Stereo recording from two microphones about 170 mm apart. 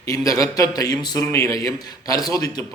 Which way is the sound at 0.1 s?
20° left (ahead or behind).